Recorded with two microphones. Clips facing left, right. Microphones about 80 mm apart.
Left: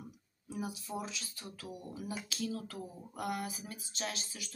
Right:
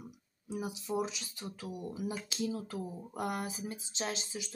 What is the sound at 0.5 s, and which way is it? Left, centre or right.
Speech, right.